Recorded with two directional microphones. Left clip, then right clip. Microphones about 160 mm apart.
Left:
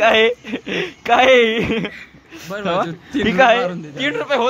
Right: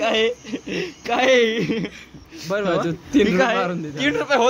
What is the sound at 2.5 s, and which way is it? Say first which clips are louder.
Speech: left 1 dB; 30° right (ahead or behind).